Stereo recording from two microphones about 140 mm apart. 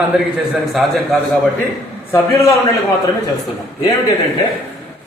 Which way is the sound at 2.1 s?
20° left (ahead or behind).